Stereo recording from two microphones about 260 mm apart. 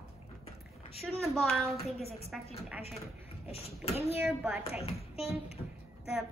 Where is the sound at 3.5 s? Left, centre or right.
Left.